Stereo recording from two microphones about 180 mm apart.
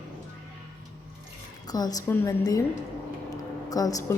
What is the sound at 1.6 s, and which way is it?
A woman's voice, 20° left (ahead or behind).